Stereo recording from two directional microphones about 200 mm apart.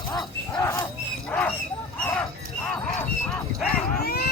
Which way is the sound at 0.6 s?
15° left (ahead or behind).